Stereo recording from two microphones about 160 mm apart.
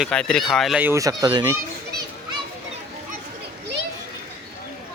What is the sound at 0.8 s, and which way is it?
Speech, 15° right (ahead or behind).